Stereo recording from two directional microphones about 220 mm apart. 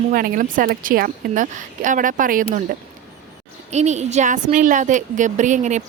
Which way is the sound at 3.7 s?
30° right (ahead or behind).